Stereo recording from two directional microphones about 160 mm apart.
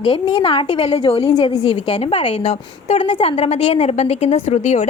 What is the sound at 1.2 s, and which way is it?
A woman's voice, 25° left (ahead or behind).